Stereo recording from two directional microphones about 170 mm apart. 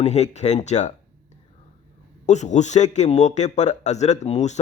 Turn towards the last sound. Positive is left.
turn(degrees=40)  # may be behind; listen again after turning